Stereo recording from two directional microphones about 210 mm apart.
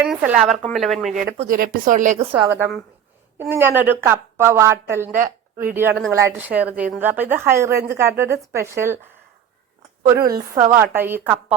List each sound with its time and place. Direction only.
0.0 s speech: 5° right (ahead or behind)
1.4 s speech: 40° right (ahead or behind)
2.1 s a woman's voice: 15° right (ahead or behind)
10.2 s a woman's voice: 15° right (ahead or behind)